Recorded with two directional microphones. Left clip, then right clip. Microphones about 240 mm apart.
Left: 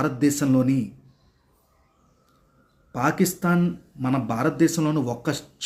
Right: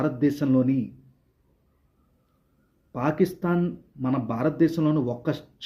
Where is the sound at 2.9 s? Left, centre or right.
Centre.